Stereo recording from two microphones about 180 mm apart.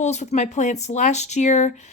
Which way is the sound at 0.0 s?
40° left (ahead or behind).